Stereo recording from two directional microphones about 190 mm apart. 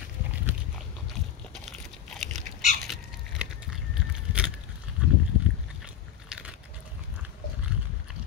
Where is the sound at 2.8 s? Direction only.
Centre (ahead or behind).